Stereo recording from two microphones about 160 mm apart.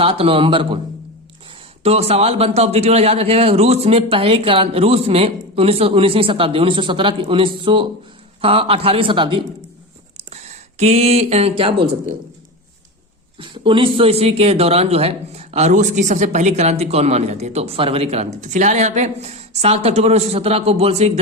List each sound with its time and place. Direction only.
0.0 s speech: 35° right (ahead or behind)
1.8 s speech: 40° right (ahead or behind)
10.2 s speech: 45° right (ahead or behind)
13.4 s speech: 30° right (ahead or behind)